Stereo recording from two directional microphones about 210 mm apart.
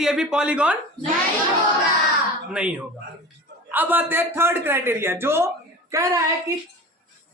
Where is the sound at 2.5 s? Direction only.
5° right (ahead or behind).